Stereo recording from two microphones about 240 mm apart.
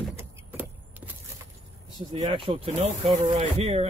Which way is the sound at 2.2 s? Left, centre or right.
Right.